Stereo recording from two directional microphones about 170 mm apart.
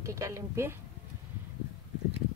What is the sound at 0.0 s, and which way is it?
Speech, 15° right (ahead or behind).